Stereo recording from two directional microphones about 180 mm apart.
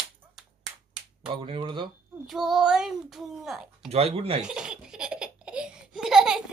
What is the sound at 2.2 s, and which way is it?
Speech, centre (ahead or behind).